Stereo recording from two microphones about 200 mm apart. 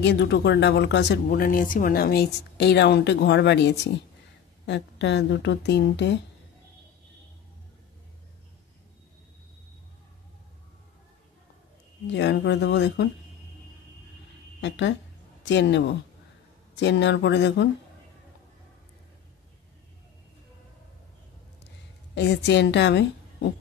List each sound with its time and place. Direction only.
0.0 s speech: 60° left (ahead or behind)
12.1 s speech: 60° left (ahead or behind)
14.6 s speech: 60° left (ahead or behind)
22.1 s a woman's voice: 60° left (ahead or behind)